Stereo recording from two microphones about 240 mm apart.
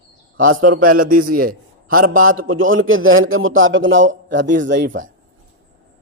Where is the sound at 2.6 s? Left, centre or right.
Right.